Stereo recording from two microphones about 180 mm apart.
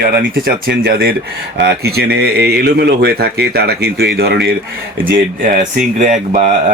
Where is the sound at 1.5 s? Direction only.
65° right (ahead or behind).